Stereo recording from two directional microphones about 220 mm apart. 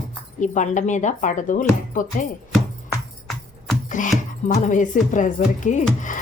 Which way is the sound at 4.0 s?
35° left (ahead or behind).